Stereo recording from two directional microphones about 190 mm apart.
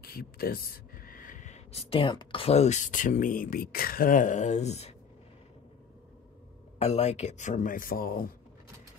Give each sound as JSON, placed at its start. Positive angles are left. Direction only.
{"t": 0.0, "sound": "speech", "side_deg": 50}
{"t": 6.8, "sound": "speech", "side_deg": 35}